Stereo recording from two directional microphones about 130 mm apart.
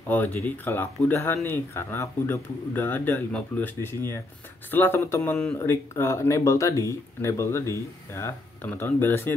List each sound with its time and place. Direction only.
0.1 s speech: 15° left (ahead or behind)